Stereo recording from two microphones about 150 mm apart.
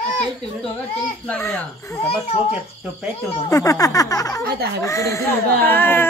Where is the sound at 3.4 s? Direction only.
20° left (ahead or behind).